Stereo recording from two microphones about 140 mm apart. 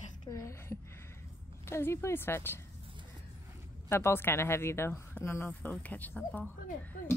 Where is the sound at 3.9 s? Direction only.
15° left (ahead or behind).